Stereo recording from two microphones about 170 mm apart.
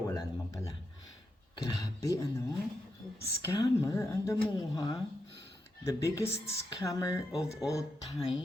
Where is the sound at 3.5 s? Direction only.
20° left (ahead or behind).